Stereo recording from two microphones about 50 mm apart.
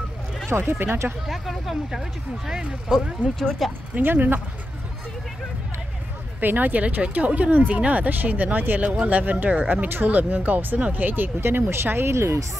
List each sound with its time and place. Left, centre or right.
0.5 s speech: right
1.2 s speech: centre
3.9 s speech: right
6.4 s speech: right